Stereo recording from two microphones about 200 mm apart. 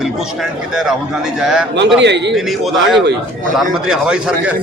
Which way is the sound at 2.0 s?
60° right (ahead or behind).